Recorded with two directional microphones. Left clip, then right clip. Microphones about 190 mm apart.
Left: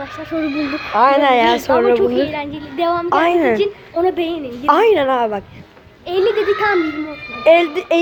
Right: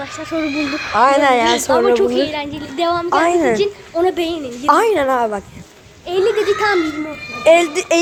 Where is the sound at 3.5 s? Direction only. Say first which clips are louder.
Even; 10° left (ahead or behind).